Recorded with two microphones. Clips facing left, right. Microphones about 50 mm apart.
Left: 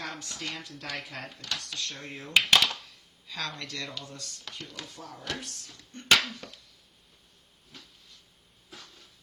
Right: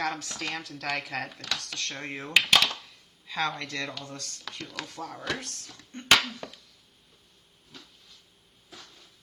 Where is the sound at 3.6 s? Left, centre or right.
Right.